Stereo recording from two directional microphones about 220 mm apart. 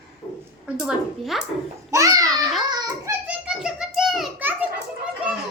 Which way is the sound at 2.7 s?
20° right (ahead or behind).